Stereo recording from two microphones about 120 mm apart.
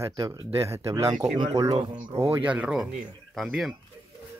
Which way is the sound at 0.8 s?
60° right (ahead or behind).